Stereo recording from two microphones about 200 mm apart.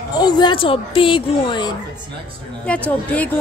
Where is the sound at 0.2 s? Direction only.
20° left (ahead or behind).